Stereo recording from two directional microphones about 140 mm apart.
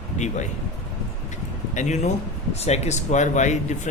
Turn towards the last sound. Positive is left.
turn(degrees=60)  # may be behind; listen again after turning